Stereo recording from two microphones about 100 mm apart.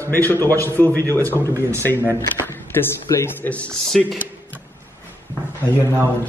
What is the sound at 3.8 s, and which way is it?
Speech, centre (ahead or behind).